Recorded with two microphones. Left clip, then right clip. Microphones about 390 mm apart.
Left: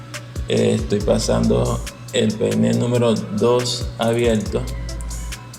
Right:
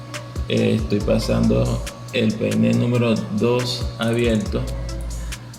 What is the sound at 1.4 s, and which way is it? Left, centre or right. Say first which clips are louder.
Speech: left 2 dB; centre.